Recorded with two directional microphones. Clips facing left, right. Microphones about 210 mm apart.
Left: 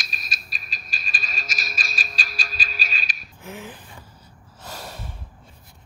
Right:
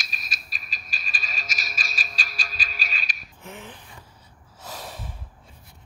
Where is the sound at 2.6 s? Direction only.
30° left (ahead or behind).